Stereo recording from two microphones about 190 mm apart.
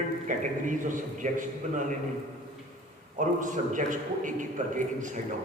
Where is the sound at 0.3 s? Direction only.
40° right (ahead or behind).